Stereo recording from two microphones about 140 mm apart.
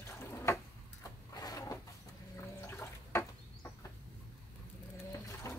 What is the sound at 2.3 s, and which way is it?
Water, 20° left (ahead or behind).